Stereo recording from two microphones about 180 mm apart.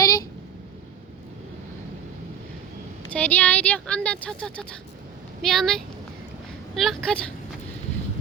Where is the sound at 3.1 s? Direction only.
10° left (ahead or behind).